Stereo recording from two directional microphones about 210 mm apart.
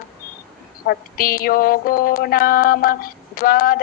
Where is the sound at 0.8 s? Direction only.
45° left (ahead or behind).